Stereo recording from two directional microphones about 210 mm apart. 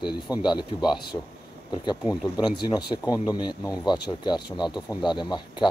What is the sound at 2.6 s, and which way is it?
Speech, 20° left (ahead or behind).